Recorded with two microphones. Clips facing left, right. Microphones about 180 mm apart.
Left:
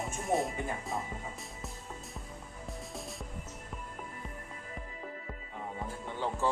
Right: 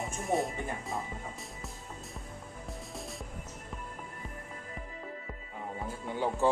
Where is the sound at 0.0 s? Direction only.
Centre (ahead or behind).